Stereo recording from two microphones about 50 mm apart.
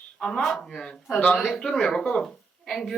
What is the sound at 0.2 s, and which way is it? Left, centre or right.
A woman's voice, centre.